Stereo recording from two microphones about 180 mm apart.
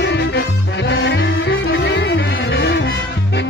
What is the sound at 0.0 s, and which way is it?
Music, 70° left (ahead or behind).